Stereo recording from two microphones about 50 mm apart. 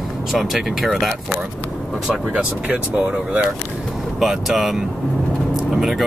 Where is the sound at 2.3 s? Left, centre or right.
Right.